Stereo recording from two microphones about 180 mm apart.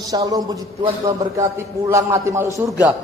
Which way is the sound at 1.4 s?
15° right (ahead or behind).